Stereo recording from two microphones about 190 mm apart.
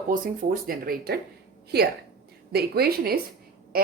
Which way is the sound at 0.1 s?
50° right (ahead or behind).